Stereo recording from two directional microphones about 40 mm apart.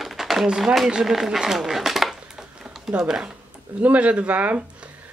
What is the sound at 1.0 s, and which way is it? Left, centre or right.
Speech, centre.